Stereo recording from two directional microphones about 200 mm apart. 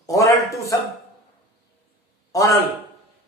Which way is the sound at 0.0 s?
15° left (ahead or behind).